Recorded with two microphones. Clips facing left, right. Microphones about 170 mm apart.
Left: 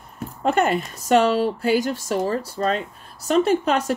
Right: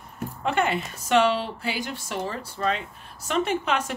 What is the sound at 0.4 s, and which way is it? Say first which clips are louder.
Speech: left 5 dB; 40° left (ahead or behind).